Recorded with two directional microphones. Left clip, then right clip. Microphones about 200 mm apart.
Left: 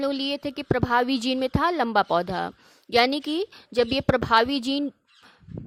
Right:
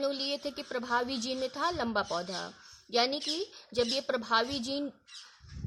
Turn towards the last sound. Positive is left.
turn(degrees=40)  # may be behind; listen again after turning